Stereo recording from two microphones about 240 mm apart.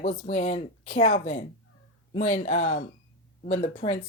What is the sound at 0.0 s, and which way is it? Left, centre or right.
Speech, left.